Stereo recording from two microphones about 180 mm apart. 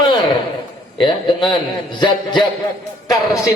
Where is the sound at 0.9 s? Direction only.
25° left (ahead or behind).